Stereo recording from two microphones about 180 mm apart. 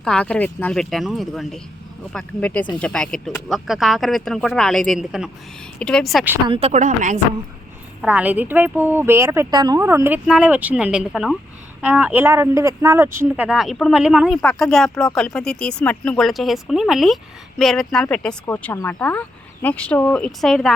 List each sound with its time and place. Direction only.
0.0 s speech: 5° left (ahead or behind)
6.5 s a woman's voice: 35° right (ahead or behind)
8.0 s speech: 10° right (ahead or behind)